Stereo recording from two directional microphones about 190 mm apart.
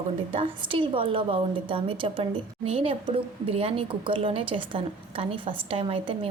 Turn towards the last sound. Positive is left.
turn(degrees=-30)  # may be behind; listen again after turning